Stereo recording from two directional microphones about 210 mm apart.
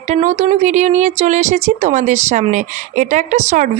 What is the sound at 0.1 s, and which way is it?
Speech, 35° right (ahead or behind).